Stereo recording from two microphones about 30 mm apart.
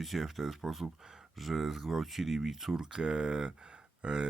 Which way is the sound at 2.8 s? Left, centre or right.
Right.